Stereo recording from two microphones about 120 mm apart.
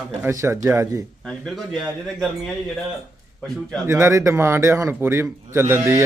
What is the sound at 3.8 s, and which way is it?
A man's voice, 20° right (ahead or behind).